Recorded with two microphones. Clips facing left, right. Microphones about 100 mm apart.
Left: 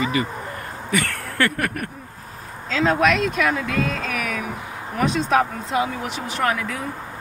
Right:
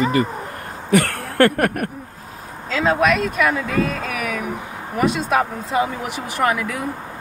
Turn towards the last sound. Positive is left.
turn(degrees=-10)  # may be behind; listen again after turning